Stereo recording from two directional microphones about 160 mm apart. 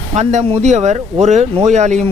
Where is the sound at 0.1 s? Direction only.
45° right (ahead or behind).